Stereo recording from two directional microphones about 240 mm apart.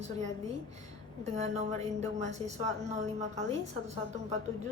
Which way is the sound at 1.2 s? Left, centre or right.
Right.